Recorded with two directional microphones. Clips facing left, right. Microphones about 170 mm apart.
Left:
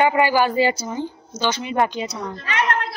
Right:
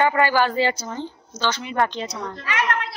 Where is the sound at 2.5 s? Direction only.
30° left (ahead or behind).